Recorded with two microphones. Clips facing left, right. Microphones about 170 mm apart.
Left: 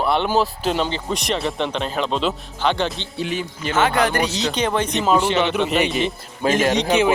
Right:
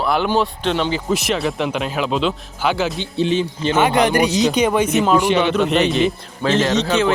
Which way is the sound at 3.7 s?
15° right (ahead or behind).